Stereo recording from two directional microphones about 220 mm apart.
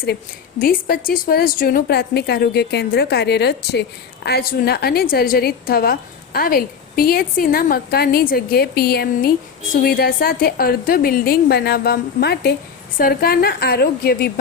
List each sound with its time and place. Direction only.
0.6 s a woman's voice: 40° left (ahead or behind)